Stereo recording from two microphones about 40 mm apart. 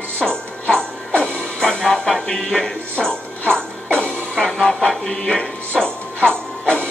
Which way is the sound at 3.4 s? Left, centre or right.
Right.